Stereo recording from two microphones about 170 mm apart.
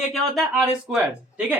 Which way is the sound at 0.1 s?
Centre (ahead or behind).